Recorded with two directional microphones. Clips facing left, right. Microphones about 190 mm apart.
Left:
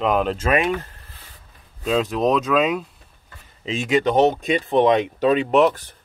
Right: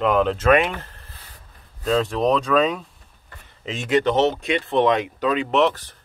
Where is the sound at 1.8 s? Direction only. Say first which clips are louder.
Even; 5° left (ahead or behind).